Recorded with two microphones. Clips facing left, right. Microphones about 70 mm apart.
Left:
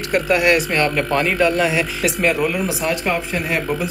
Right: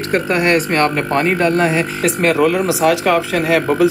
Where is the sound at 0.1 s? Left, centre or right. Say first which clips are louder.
Right 1 dB; right.